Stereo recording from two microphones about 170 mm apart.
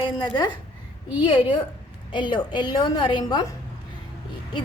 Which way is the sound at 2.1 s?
25° left (ahead or behind).